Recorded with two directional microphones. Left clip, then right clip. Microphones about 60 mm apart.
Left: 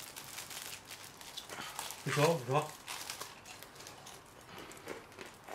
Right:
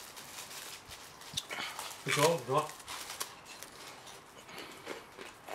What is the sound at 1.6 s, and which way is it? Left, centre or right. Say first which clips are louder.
Dog: right 3 dB; right.